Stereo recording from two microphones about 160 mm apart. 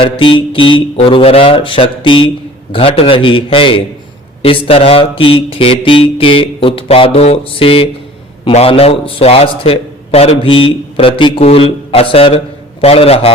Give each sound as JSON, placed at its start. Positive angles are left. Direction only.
{"t": 0.0, "sound": "a man's voice", "side_deg": 30}